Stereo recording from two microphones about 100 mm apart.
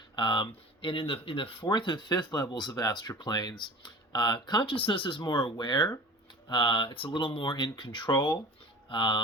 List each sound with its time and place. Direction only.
0.2 s speech: 50° left (ahead or behind); by 1.5 s 65° left (ahead or behind)
1.6 s speech: 50° left (ahead or behind)